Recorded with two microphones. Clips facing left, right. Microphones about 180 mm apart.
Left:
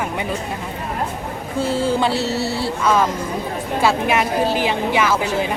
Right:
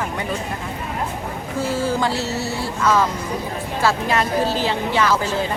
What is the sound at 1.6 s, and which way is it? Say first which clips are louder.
Speech: left 2 dB; 25° left (ahead or behind).